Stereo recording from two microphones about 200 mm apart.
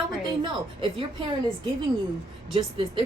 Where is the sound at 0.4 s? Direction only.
25° right (ahead or behind).